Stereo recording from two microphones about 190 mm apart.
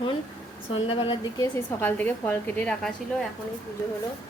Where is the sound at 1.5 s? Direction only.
10° left (ahead or behind).